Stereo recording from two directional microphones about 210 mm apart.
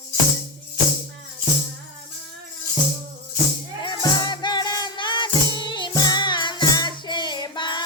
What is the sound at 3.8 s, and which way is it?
Music, 20° left (ahead or behind).